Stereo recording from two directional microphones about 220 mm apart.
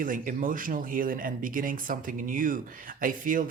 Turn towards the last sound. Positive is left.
turn(degrees=-40)  # may be behind; listen again after turning